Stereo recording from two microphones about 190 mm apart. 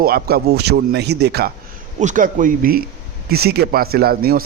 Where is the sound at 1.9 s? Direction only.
40° right (ahead or behind).